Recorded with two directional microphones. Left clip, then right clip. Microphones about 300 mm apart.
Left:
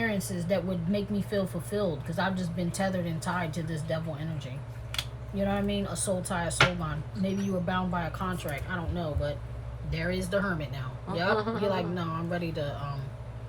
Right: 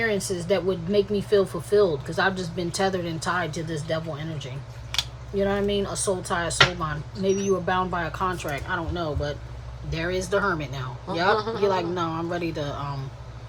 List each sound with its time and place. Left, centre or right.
0.0 s speech: right
5.4 s speech: right
11.3 s a man's voice: centre
11.7 s speech: right